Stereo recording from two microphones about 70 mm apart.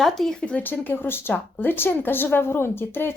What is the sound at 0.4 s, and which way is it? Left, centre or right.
A woman's voice, left.